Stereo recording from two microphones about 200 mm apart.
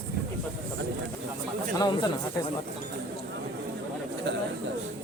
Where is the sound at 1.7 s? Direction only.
20° left (ahead or behind).